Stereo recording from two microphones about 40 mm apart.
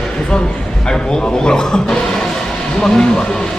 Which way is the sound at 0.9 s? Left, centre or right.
Centre.